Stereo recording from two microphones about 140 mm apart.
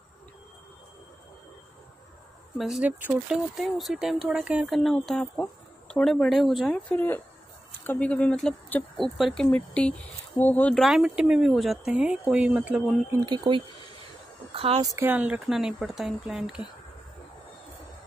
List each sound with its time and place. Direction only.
2.5 s speech: 5° right (ahead or behind)
7.8 s speech: 10° left (ahead or behind)
10.8 s speech: centre (ahead or behind)
13.2 s speech: 30° right (ahead or behind)
14.8 s speech: 15° right (ahead or behind)